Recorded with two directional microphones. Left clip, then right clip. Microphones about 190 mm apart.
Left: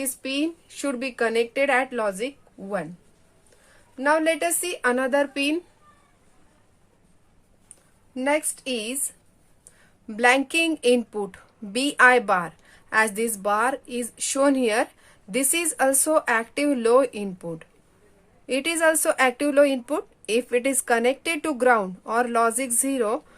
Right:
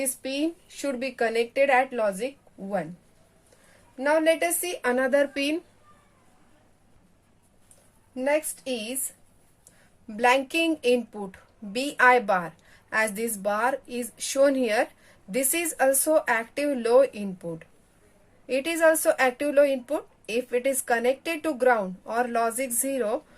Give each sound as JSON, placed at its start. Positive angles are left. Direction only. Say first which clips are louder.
{"t": 0.0, "sound": "speech", "louder": "left 1 dB", "side_deg": 20}
{"t": 3.9, "sound": "speech", "louder": "left 1 dB", "side_deg": 25}
{"t": 8.1, "sound": "speech", "louder": "left 1 dB", "side_deg": 40}